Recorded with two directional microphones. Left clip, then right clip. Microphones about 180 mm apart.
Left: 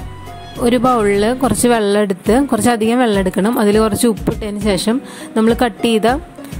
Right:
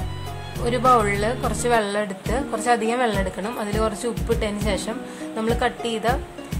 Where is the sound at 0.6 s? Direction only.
40° left (ahead or behind).